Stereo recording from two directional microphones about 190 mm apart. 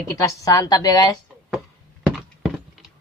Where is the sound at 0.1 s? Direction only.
15° left (ahead or behind).